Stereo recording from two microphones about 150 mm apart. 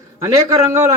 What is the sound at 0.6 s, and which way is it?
Speech, 15° right (ahead or behind).